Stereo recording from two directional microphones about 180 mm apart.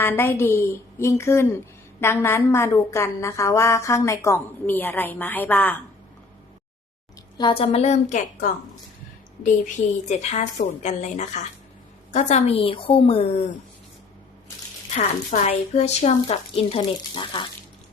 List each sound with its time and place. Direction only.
0.0 s a woman's voice: 10° left (ahead or behind)
7.3 s speech: 30° left (ahead or behind)
14.9 s speech: 40° left (ahead or behind)